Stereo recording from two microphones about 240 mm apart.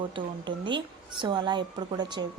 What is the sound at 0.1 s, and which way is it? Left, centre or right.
A woman's voice, centre.